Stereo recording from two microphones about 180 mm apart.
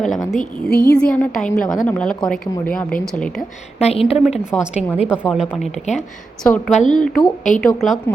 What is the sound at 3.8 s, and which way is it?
Speech, 35° left (ahead or behind).